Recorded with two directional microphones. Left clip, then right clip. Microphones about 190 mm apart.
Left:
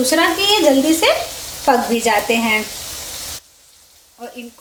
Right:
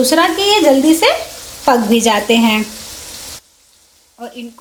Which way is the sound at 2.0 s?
40° right (ahead or behind).